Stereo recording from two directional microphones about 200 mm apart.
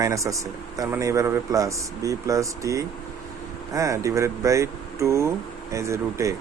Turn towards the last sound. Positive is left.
turn(degrees=-15)  # may be behind; listen again after turning